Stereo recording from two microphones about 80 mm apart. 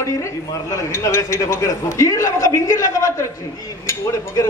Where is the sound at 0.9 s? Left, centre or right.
Left.